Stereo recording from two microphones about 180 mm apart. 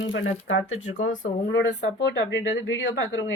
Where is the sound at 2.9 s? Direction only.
90° left.